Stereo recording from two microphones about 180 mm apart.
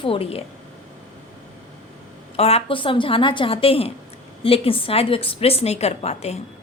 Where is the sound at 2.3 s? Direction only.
35° left (ahead or behind).